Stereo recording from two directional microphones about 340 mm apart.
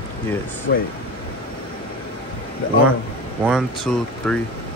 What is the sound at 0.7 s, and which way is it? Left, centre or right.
Speech, left.